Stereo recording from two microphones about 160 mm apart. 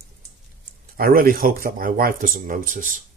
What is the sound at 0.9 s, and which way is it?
Speech, 65° right (ahead or behind).